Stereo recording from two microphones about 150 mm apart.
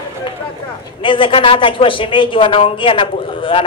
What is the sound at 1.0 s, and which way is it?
Speech, 35° left (ahead or behind).